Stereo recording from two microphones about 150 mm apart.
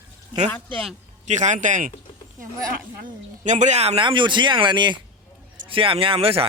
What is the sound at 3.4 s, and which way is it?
A man's voice, 55° right (ahead or behind).